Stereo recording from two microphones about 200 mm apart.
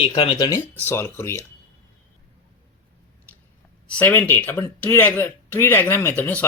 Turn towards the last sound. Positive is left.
turn(degrees=10)  # may be behind; listen again after turning